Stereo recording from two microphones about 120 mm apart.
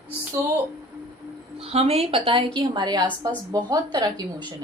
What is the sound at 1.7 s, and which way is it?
A woman's voice, 60° right (ahead or behind).